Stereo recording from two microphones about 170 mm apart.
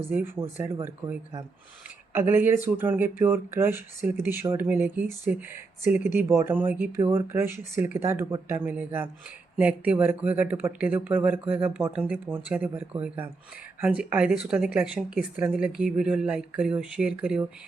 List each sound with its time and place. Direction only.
0.1 s speech: 10° right (ahead or behind)